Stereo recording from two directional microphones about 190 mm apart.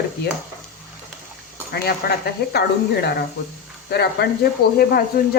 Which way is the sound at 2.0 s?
55° left (ahead or behind).